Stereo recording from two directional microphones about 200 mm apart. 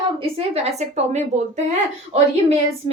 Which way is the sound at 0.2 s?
30° right (ahead or behind).